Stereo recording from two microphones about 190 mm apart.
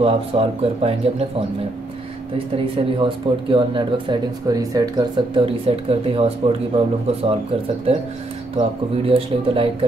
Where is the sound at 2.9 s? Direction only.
25° right (ahead or behind).